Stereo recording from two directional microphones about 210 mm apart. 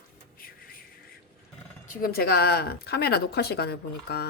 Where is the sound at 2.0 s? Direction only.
45° left (ahead or behind).